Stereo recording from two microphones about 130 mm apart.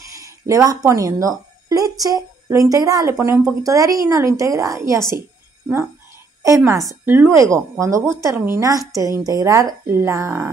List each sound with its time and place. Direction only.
0.1 s a sound: 25° right (ahead or behind)
0.8 s speech: 25° right (ahead or behind)
6.4 s speech: 25° right (ahead or behind)